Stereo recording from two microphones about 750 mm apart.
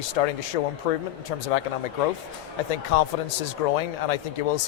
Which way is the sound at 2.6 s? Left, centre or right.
Left.